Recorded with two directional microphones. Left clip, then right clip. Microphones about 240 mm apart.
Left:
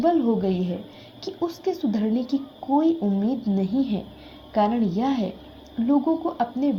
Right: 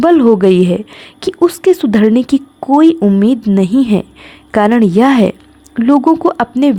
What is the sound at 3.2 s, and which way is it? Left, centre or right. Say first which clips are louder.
Speech: right 13 dB; right.